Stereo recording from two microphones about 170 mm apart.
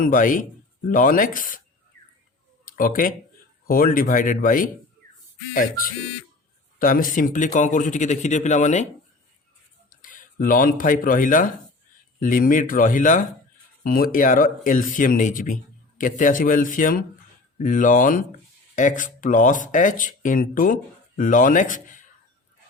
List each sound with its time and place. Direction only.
0.0 s a man's voice: 50° left (ahead or behind)
2.6 s a man's voice: 55° left (ahead or behind)
6.7 s a man's voice: 55° left (ahead or behind)
10.0 s a man's voice: 50° left (ahead or behind)